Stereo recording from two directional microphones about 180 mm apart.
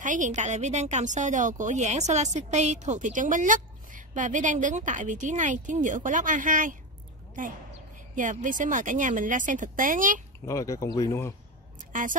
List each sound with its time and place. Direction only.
0.0 s speech: 45° right (ahead or behind)
8.2 s speech: 45° right (ahead or behind)
10.4 s speech: 15° left (ahead or behind)
11.9 s speech: 45° right (ahead or behind)